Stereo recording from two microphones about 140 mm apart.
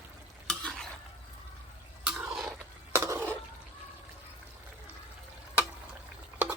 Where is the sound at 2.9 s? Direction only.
15° right (ahead or behind).